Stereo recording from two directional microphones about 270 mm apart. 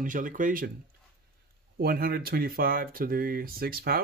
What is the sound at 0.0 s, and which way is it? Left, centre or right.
Speech, right.